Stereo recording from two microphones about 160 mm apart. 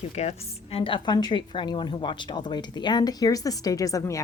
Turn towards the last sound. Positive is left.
turn(degrees=20)  # may be behind; listen again after turning